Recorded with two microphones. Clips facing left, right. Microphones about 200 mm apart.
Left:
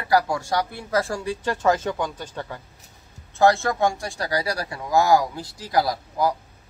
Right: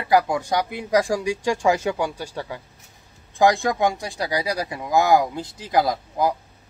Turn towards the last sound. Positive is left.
turn(degrees=-20)  # may be behind; listen again after turning